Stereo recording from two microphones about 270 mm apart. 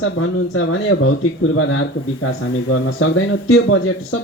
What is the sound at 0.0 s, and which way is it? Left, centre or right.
Speech, left.